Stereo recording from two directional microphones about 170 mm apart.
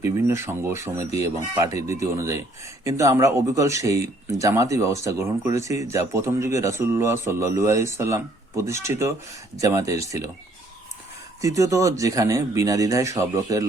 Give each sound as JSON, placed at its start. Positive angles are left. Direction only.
{"t": 0.0, "sound": "speech", "side_deg": -15}
{"t": 11.3, "sound": "speech", "side_deg": -20}